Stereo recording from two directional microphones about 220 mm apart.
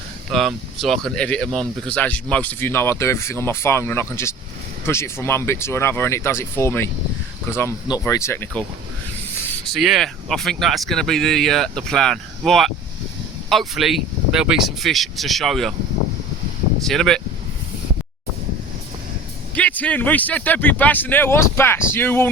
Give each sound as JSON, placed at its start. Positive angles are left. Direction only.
{"t": 0.3, "sound": "speech", "side_deg": 0}
{"t": 9.7, "sound": "speech", "side_deg": 0}
{"t": 16.8, "sound": "speech", "side_deg": 0}
{"t": 19.5, "sound": "speech", "side_deg": 5}